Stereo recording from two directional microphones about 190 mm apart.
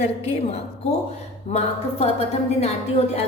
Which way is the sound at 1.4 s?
35° left (ahead or behind).